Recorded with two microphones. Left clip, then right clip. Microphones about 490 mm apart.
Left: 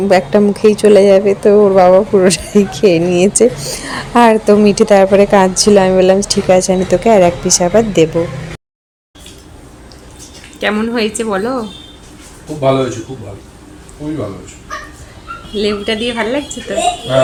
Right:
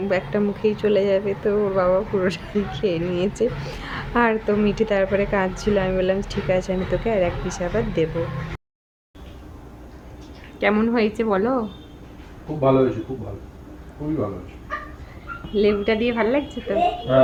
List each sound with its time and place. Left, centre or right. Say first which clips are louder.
0.1 s a woman's voice: left 13 dB; right
10.6 s speech: left 5 dB; right
15.5 s speech: left 3 dB; right